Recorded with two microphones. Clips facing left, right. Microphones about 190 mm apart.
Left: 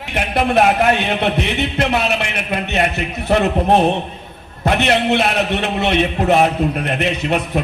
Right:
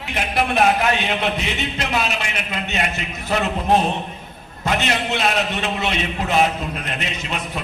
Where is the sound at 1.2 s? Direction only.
60° left (ahead or behind).